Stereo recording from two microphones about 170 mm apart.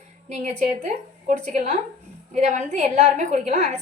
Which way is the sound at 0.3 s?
45° right (ahead or behind).